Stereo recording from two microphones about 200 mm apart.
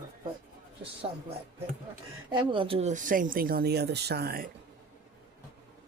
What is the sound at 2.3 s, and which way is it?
Speech, 25° right (ahead or behind).